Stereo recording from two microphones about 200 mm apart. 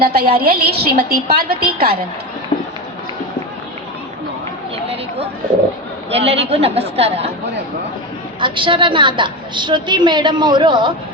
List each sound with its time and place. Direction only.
0.0 s a woman's voice: 50° right (ahead or behind)
2.5 s run: 20° left (ahead or behind)
6.1 s speech: 30° right (ahead or behind)
8.4 s a woman's voice: 25° right (ahead or behind)